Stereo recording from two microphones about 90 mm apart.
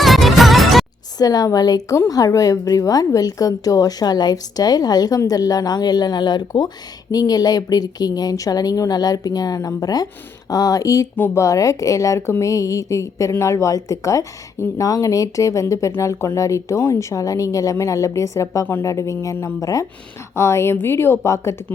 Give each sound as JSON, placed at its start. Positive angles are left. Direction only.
{"t": 0.0, "sound": "music", "side_deg": 0}
{"t": 1.2, "sound": "a woman's voice", "side_deg": 45}